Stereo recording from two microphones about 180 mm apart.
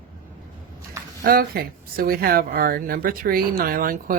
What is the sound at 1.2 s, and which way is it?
Speech, 55° right (ahead or behind).